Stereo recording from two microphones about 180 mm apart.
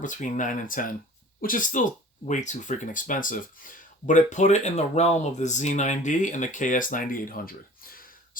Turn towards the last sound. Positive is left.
turn(degrees=50)  # may be behind; listen again after turning